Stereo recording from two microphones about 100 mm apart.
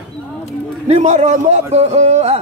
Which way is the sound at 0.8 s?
90° right.